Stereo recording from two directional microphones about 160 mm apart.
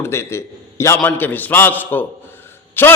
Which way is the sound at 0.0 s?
15° left (ahead or behind).